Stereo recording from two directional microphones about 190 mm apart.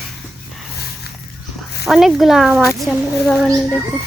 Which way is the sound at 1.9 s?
Centre (ahead or behind).